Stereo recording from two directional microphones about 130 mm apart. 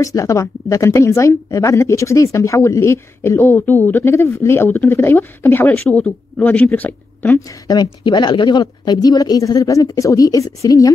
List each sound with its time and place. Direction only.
0.0 s speech: 25° left (ahead or behind)
7.6 s speech: 30° left (ahead or behind)